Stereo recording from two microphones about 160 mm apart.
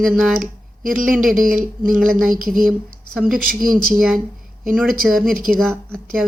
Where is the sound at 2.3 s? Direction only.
60° right (ahead or behind).